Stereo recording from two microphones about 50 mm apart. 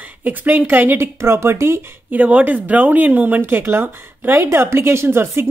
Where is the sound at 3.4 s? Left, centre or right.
Right.